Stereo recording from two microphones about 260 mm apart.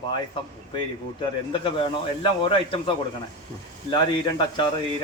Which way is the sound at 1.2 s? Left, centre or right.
Left.